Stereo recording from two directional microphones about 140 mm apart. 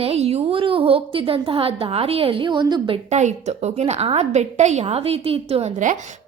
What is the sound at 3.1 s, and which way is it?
A woman's voice, 55° right (ahead or behind).